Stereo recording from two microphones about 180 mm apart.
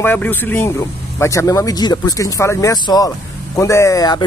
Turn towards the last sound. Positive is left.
turn(degrees=20)  # may be behind; listen again after turning